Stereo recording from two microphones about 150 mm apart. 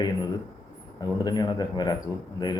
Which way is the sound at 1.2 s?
25° left (ahead or behind).